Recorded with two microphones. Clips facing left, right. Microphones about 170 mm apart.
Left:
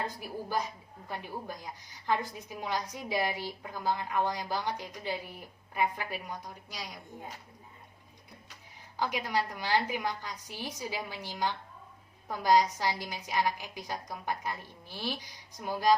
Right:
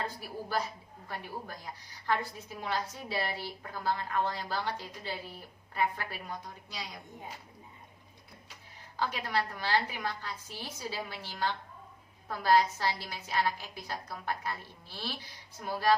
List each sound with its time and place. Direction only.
0.0 s a woman's voice: 15° left (ahead or behind)
9.0 s a woman's voice: 15° left (ahead or behind)